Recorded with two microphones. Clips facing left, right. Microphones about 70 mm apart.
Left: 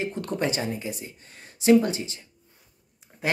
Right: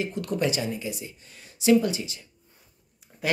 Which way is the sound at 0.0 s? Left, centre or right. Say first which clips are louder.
Right 1 dB; left.